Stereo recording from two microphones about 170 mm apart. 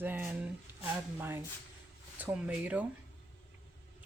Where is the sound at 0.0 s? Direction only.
10° right (ahead or behind).